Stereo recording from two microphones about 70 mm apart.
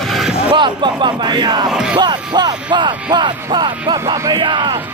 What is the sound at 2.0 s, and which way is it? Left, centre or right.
Speech, right.